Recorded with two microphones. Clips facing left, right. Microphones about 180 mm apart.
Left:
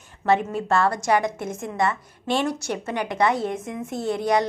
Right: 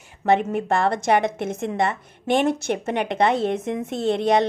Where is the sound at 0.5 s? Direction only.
20° right (ahead or behind).